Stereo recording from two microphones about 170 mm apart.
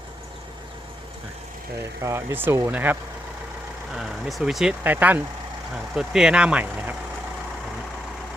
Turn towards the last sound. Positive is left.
turn(degrees=-10)  # may be behind; listen again after turning